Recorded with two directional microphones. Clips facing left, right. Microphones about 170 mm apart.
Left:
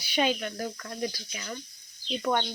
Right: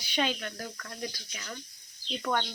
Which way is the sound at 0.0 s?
10° left (ahead or behind).